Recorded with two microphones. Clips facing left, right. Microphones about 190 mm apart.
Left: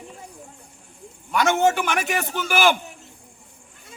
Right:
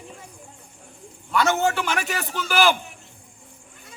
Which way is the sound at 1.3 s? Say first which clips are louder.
Left 2 dB; 15° left (ahead or behind).